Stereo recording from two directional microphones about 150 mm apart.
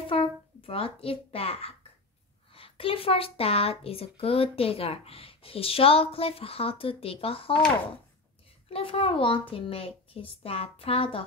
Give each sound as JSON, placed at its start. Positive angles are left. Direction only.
{"t": 0.0, "sound": "a child's voice", "side_deg": 40}
{"t": 8.6, "sound": "a child's voice", "side_deg": 40}